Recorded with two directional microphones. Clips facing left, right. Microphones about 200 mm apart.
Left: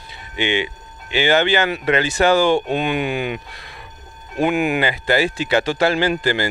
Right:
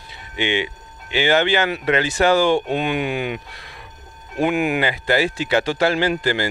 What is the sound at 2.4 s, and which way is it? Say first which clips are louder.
Speech: left 1 dB; 45° left (ahead or behind).